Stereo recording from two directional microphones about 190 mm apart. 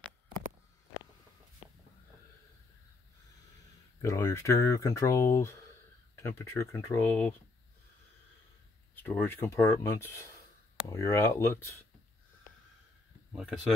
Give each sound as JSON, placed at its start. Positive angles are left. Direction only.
{"t": 4.0, "sound": "speech", "side_deg": 15}
{"t": 8.9, "sound": "speech", "side_deg": 10}
{"t": 13.3, "sound": "speech", "side_deg": -5}